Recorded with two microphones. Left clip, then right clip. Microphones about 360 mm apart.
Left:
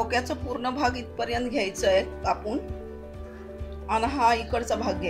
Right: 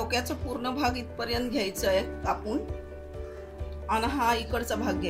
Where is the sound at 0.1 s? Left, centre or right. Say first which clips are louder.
Left 3 dB; centre.